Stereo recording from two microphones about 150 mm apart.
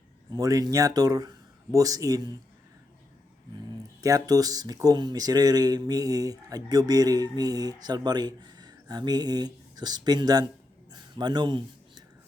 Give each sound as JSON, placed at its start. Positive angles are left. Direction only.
{"t": 0.3, "sound": "speech", "side_deg": -25}
{"t": 4.0, "sound": "speech", "side_deg": -25}